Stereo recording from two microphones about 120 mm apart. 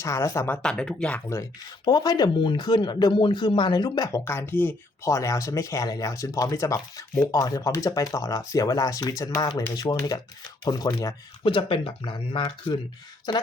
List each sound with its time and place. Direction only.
0.0 s speech: 25° left (ahead or behind)
0.5 s speech: 5° left (ahead or behind)
1.8 s speech: 35° left (ahead or behind)
11.4 s speech: 45° left (ahead or behind)